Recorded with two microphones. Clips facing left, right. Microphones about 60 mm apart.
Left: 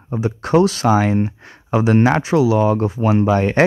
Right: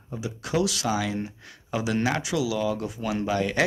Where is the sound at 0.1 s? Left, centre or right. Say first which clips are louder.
Left 12 dB; left.